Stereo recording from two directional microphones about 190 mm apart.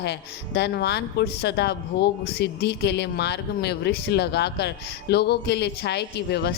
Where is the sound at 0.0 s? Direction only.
60° left (ahead or behind).